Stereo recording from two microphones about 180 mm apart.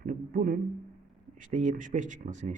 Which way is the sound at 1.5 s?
45° right (ahead or behind).